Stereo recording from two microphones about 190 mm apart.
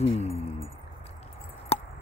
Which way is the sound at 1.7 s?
30° left (ahead or behind).